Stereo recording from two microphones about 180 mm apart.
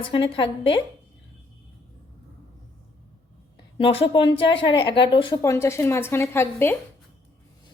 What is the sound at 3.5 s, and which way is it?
A woman's voice, 30° left (ahead or behind).